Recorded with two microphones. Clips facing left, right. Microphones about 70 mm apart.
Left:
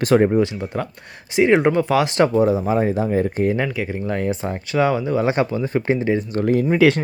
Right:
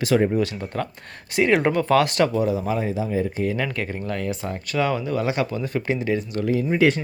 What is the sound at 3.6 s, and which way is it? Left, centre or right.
Speech, centre.